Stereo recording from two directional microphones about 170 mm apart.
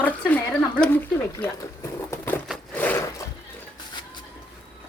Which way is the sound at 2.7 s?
10° left (ahead or behind).